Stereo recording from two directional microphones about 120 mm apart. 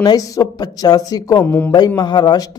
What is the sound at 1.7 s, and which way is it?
Speech, 35° left (ahead or behind).